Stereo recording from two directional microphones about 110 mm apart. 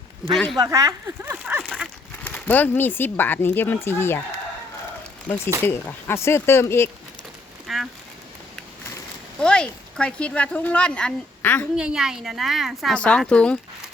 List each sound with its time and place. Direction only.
0.3 s a woman's voice: centre (ahead or behind)
0.7 s speech: 30° right (ahead or behind)
1.2 s a sound: 15° right (ahead or behind)
2.2 s speech: 15° left (ahead or behind)
5.6 s speech: 20° left (ahead or behind)
7.7 s speech: centre (ahead or behind)
9.4 s speech: 10° left (ahead or behind)
11.8 s a woman's voice: 5° right (ahead or behind)
12.9 s speech: 10° left (ahead or behind)